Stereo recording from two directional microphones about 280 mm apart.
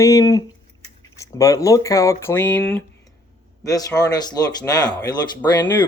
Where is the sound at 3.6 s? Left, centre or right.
Centre.